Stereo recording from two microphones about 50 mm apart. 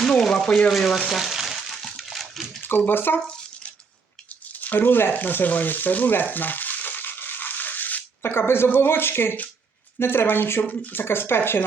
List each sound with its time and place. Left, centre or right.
0.2 s speech: centre
1.1 s frying: centre
2.0 s a sound: centre
2.6 s speech: left
4.5 s speech: left
5.1 s crumpling: left
8.2 s speech: left
11.0 s speech: left